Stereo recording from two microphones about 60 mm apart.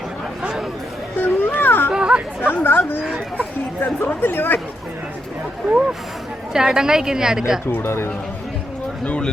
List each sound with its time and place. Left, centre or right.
1.2 s a sound: left
1.9 s chatter: centre
2.4 s speech: left
3.0 s a woman's voice: centre
3.8 s speech: left
6.5 s a woman's voice: centre
7.7 s speech: left
9.0 s speech: centre